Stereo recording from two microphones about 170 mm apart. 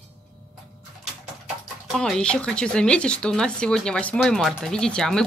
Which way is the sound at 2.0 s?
5° left (ahead or behind).